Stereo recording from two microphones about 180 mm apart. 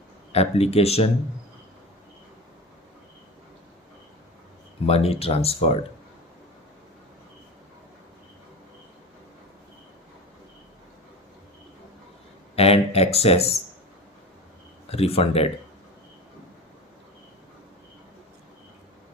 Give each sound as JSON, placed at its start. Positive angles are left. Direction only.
{"t": 0.3, "sound": "speech", "side_deg": 35}
{"t": 4.9, "sound": "speech", "side_deg": 35}
{"t": 12.5, "sound": "speech", "side_deg": 35}
{"t": 14.8, "sound": "speech", "side_deg": 35}